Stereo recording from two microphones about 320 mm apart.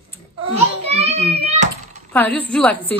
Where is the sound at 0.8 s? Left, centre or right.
Centre.